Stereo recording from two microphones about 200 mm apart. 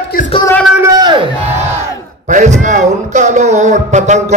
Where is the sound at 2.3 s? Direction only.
40° right (ahead or behind).